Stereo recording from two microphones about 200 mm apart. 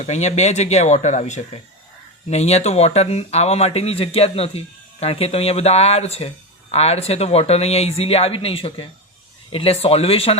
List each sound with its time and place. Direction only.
0.0 s speech: 35° left (ahead or behind)